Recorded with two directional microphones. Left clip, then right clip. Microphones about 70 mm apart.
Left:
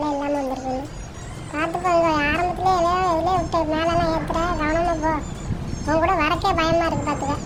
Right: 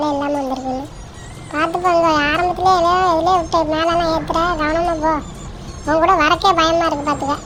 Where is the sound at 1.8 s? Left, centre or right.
Right.